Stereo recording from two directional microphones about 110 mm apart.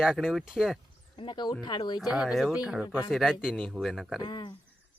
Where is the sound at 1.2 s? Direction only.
45° left (ahead or behind).